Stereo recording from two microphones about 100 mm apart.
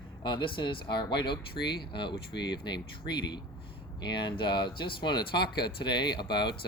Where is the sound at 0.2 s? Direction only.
50° left (ahead or behind).